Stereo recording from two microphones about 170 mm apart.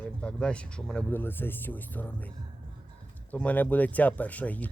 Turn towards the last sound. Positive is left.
turn(degrees=10)  # may be behind; listen again after turning